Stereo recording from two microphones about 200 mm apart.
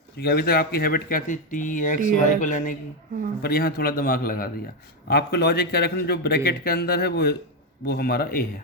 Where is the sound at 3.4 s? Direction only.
50° left (ahead or behind).